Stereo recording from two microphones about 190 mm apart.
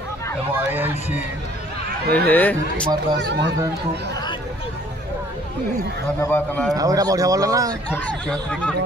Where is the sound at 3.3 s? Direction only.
65° right (ahead or behind).